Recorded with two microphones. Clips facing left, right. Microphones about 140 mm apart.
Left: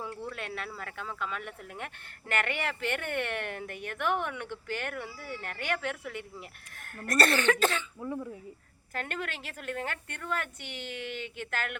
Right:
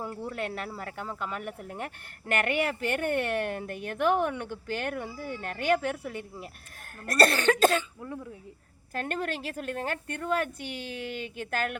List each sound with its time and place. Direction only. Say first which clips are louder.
0.3 s speech: right 5 dB; 40° right (ahead or behind)
7.9 s speech: left 3 dB; centre (ahead or behind)
8.9 s speech: right 5 dB; 35° right (ahead or behind)